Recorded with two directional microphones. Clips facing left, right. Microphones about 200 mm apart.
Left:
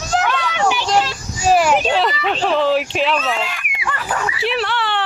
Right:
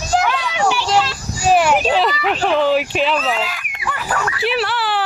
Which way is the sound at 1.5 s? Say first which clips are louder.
Even; centre (ahead or behind).